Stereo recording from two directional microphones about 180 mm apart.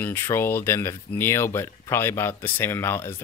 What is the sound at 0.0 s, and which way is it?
Speech, 15° left (ahead or behind).